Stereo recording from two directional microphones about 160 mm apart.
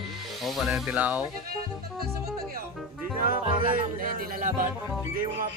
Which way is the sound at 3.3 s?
60° right (ahead or behind).